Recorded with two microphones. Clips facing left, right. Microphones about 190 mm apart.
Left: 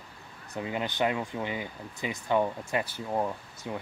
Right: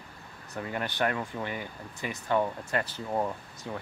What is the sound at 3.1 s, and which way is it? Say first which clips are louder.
Speech: even; 5° left (ahead or behind).